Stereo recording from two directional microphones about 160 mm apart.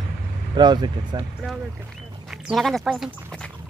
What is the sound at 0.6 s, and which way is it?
Speech, 25° right (ahead or behind).